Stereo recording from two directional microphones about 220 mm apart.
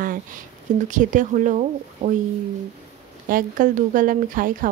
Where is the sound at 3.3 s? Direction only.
40° right (ahead or behind).